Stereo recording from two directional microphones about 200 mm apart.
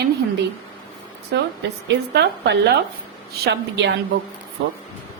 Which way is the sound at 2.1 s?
60° right (ahead or behind).